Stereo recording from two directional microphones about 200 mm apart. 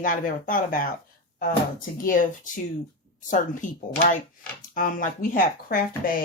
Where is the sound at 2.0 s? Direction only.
40° left (ahead or behind).